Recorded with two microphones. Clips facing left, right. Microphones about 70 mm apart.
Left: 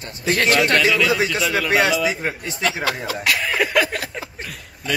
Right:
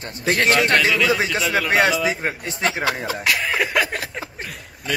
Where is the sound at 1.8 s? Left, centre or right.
Right.